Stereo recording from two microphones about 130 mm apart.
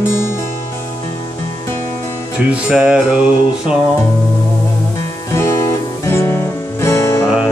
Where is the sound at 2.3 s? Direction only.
10° right (ahead or behind).